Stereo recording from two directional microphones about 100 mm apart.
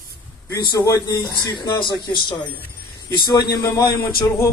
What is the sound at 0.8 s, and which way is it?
A man's voice, 35° left (ahead or behind).